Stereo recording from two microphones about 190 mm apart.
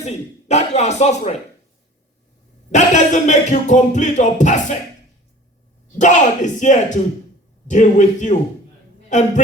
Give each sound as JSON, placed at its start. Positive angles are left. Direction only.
{"t": 0.0, "sound": "music", "side_deg": 35}
{"t": 2.7, "sound": "music", "side_deg": 40}
{"t": 6.0, "sound": "music", "side_deg": 40}
{"t": 9.0, "sound": "speech", "side_deg": 40}